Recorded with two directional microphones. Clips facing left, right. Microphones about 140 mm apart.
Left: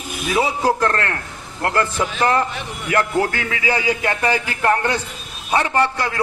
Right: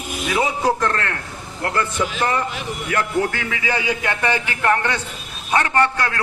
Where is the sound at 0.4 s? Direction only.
35° left (ahead or behind).